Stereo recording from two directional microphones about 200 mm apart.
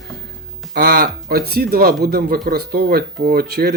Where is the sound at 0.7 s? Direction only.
50° right (ahead or behind).